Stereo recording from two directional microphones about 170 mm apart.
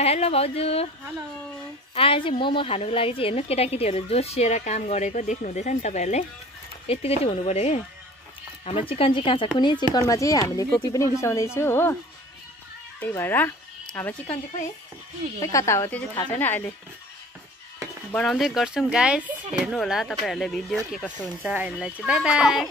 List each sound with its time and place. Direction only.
0.0 s a woman's voice: 35° left (ahead or behind)
2.0 s a woman's voice: 30° left (ahead or behind); by 12.0 s 15° left (ahead or behind)
13.0 s a woman's voice: 10° left (ahead or behind)
15.4 s a woman's voice: 20° left (ahead or behind)
18.1 s speech: 5° left (ahead or behind)
21.4 s speech: 10° right (ahead or behind)